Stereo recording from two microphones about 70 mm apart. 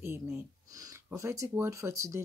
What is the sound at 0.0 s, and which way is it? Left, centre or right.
Speech, right.